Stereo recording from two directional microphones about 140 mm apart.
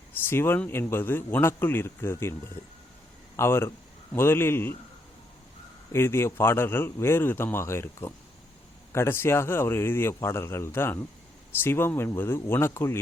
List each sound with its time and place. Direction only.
0.3 s a man's voice: 15° left (ahead or behind)
3.3 s a man's voice: 20° left (ahead or behind)
5.9 s a man's voice: 15° left (ahead or behind)